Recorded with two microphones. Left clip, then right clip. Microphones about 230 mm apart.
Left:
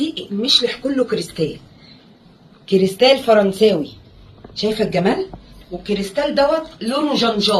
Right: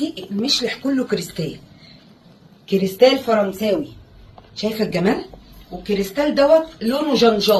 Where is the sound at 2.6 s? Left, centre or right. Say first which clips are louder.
Left 1 dB; left.